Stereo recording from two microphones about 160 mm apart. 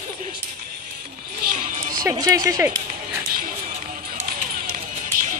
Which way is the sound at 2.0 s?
25° right (ahead or behind).